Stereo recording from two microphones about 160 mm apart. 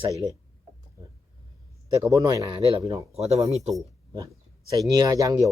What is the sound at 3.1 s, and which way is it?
Speech, 40° right (ahead or behind).